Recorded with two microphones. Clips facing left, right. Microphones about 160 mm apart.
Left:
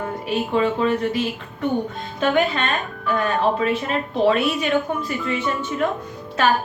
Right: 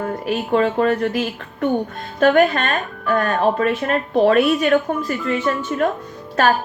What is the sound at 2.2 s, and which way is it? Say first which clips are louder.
A woman's voice: right 5 dB; 50° right (ahead or behind).